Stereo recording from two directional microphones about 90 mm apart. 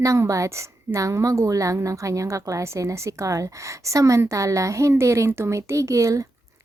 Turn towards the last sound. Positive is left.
turn(degrees=-35)  # may be behind; listen again after turning